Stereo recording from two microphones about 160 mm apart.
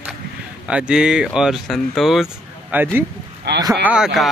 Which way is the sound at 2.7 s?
10° right (ahead or behind).